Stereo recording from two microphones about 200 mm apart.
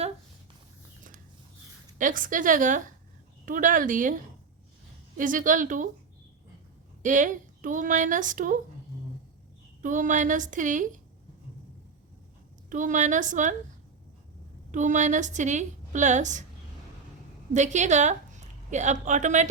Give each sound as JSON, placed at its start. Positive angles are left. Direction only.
{"t": 2.0, "sound": "a woman's voice", "side_deg": -40}
{"t": 7.0, "sound": "a woman's voice", "side_deg": -40}
{"t": 9.8, "sound": "a woman's voice", "side_deg": -40}
{"t": 12.7, "sound": "a woman's voice", "side_deg": -40}
{"t": 14.7, "sound": "a woman's voice", "side_deg": -40}
{"t": 17.5, "sound": "a woman's voice", "side_deg": -35}